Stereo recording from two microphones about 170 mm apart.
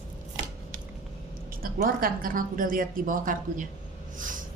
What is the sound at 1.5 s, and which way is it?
A woman's voice, 60° right (ahead or behind).